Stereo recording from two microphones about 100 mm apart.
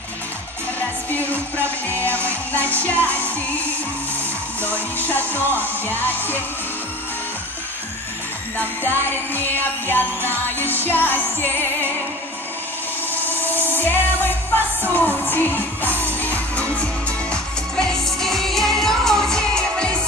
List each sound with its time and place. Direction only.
0.7 s music: 15° left (ahead or behind)
4.6 s music: 20° left (ahead or behind)
8.5 s music: 20° left (ahead or behind)
13.3 s music: 20° left (ahead or behind)